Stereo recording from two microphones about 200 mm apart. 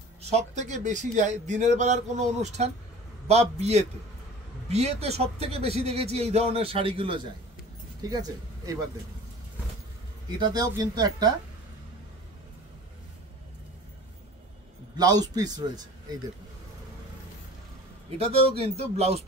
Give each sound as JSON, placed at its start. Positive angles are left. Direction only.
{"t": 0.2, "sound": "speech", "side_deg": -35}
{"t": 10.4, "sound": "a man's voice", "side_deg": -20}
{"t": 15.0, "sound": "a man's voice", "side_deg": -20}
{"t": 18.1, "sound": "a man's voice", "side_deg": -30}